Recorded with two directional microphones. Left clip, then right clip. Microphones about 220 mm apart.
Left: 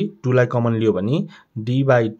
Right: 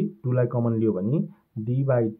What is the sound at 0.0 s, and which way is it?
Speech, 30° left (ahead or behind).